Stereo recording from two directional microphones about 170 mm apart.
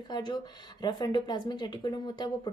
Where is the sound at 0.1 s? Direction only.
25° left (ahead or behind).